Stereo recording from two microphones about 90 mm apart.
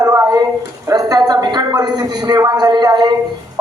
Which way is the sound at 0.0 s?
35° right (ahead or behind).